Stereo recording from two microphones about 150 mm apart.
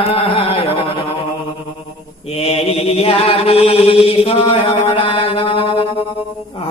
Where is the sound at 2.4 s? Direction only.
40° left (ahead or behind).